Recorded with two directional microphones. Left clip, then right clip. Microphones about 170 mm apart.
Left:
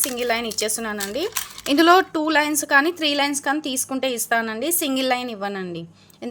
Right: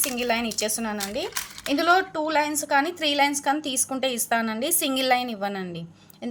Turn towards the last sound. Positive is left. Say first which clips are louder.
# left 2 dB
turn(degrees=25)  # may be behind; listen again after turning